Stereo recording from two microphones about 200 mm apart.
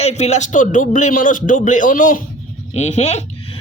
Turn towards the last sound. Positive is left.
turn(degrees=35)  # may be behind; listen again after turning